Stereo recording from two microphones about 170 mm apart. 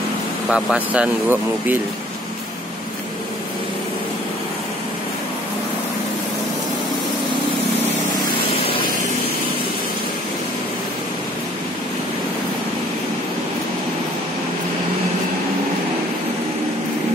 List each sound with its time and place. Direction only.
0.5 s speech: 5° right (ahead or behind)